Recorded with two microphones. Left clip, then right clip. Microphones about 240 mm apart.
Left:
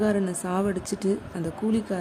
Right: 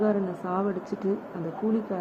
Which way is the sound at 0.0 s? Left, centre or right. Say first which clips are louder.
Left 1 dB; left.